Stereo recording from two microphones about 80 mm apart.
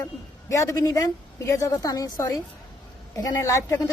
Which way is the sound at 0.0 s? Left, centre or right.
Left.